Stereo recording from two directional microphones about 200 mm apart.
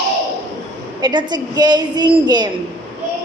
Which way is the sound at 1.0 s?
20° right (ahead or behind).